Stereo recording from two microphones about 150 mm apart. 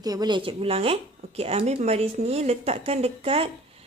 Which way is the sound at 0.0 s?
25° right (ahead or behind).